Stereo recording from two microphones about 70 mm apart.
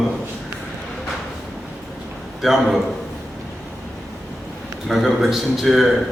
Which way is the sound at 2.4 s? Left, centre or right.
Centre.